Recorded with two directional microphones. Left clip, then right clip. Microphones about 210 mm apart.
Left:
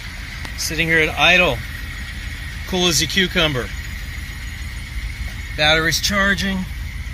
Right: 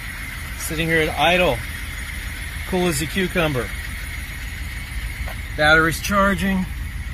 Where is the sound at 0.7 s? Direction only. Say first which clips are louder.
Left 3 dB; 5° left (ahead or behind).